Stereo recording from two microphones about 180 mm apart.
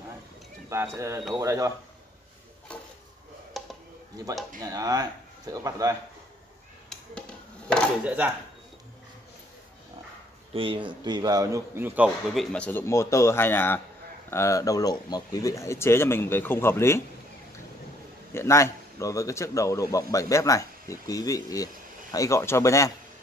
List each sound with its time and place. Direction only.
0.7 s a man's voice: 15° right (ahead or behind)
2.7 s a sound: 5° left (ahead or behind)
4.2 s speech: 20° right (ahead or behind)
6.9 s a sound: 5° left (ahead or behind)
10.5 s a man's voice: 30° right (ahead or behind); by 12.4 s 10° right (ahead or behind)
12.5 s speech: 10° left (ahead or behind)
18.3 s speech: 15° left (ahead or behind)